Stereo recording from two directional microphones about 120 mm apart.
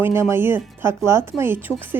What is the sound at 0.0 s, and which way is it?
A woman's voice, 20° right (ahead or behind).